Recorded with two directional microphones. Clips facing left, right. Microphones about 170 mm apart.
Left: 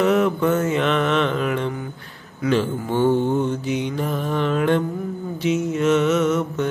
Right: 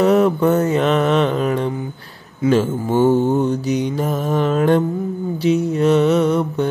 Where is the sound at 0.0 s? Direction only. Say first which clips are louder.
Right 4 dB; 35° right (ahead or behind).